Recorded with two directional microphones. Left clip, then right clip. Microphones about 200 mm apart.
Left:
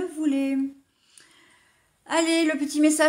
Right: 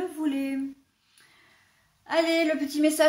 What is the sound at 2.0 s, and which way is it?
Speech, 45° left (ahead or behind).